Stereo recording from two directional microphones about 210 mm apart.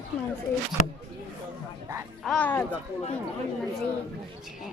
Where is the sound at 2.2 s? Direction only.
5° left (ahead or behind).